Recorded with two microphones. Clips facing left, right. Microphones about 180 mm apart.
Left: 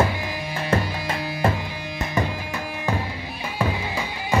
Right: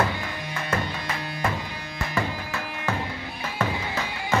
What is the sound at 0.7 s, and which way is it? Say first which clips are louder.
Music: left 5 dB; 30° left (ahead or behind).